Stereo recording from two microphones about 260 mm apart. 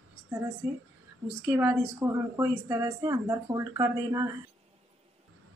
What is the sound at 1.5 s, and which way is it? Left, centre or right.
Speech, centre.